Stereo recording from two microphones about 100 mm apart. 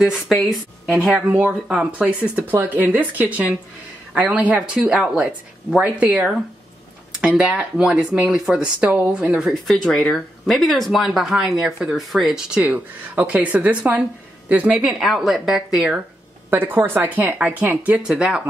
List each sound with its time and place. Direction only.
0.0 s speech: centre (ahead or behind)
9.8 s speech: 5° left (ahead or behind)
16.4 s speech: 20° right (ahead or behind)